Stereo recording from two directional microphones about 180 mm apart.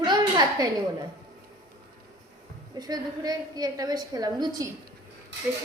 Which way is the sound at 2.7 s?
20° right (ahead or behind).